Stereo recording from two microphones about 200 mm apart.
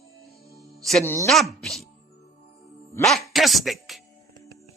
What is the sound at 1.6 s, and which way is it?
Speech, centre (ahead or behind).